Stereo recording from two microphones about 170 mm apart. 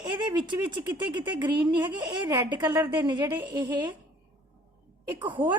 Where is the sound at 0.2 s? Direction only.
25° right (ahead or behind).